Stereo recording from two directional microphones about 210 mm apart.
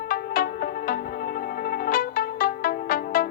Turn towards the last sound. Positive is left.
turn(degrees=45)  # may be behind; listen again after turning